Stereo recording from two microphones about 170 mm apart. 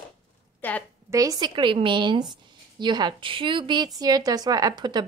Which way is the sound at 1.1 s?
20° right (ahead or behind).